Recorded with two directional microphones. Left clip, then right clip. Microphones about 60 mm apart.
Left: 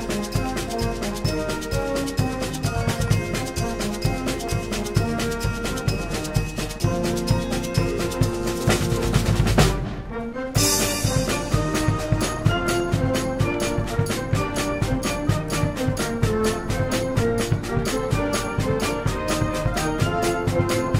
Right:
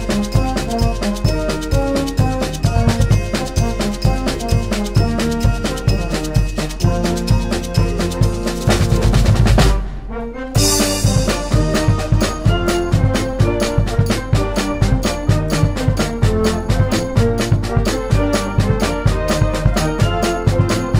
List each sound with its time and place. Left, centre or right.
8.6 s drum: right
10.6 s music: right